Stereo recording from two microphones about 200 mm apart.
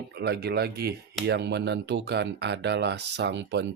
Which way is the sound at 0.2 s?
55° right (ahead or behind).